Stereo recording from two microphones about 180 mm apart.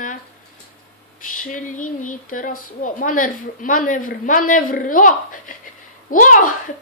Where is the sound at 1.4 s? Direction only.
45° left (ahead or behind).